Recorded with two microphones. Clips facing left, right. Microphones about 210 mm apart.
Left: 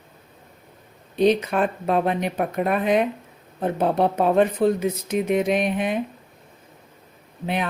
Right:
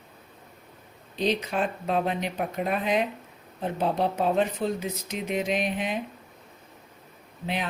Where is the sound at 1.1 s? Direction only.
55° left (ahead or behind).